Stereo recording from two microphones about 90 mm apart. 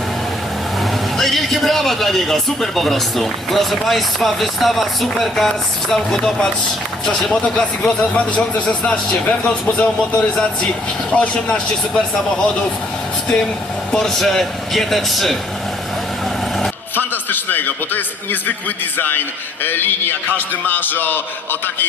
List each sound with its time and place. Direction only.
1.2 s speech: centre (ahead or behind)
16.9 s a man's voice: 20° left (ahead or behind)
19.6 s a man's voice: 25° left (ahead or behind)